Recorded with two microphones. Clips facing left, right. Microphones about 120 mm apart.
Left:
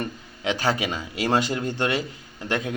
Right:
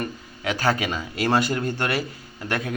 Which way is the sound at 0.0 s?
20° left (ahead or behind).